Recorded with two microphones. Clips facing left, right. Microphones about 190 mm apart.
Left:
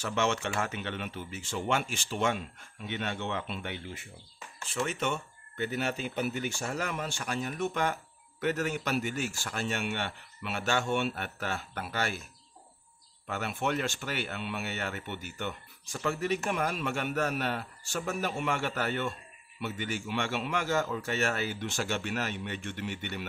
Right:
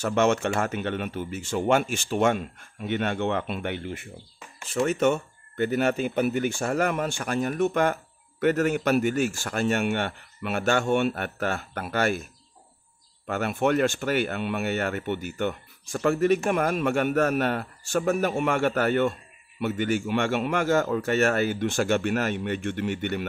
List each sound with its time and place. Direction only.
0.0 s speech: 50° right (ahead or behind)
4.7 s speech: 45° right (ahead or behind)
13.3 s speech: 50° right (ahead or behind)